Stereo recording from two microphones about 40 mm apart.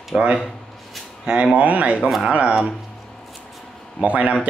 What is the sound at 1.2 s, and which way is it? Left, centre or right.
Speech, right.